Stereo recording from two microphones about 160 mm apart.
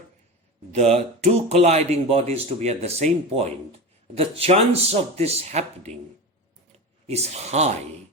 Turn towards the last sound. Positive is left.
turn(degrees=-45)  # may be behind; listen again after turning